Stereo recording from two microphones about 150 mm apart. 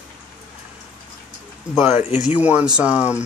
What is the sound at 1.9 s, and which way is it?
Speech, 45° left (ahead or behind).